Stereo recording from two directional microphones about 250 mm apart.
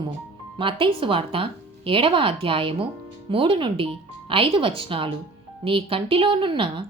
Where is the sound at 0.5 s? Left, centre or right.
Centre.